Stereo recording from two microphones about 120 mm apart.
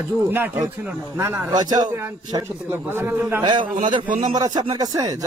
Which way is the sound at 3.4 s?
40° right (ahead or behind).